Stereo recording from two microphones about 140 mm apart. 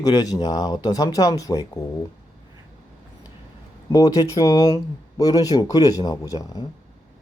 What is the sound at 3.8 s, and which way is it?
Speech, 30° left (ahead or behind).